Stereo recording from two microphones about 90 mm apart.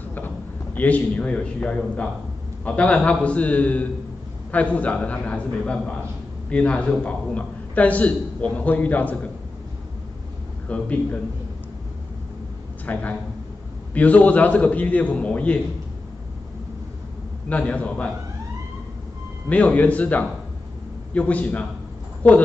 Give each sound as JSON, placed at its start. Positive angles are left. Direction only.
{"t": 0.7, "sound": "a man's voice", "side_deg": 15}
{"t": 10.7, "sound": "a man's voice", "side_deg": 15}
{"t": 12.8, "sound": "a man's voice", "side_deg": 15}
{"t": 17.5, "sound": "a man's voice", "side_deg": 15}
{"t": 19.5, "sound": "a man's voice", "side_deg": 15}